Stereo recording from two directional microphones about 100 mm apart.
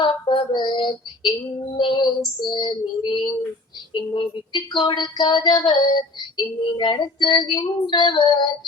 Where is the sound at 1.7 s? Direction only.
50° left (ahead or behind).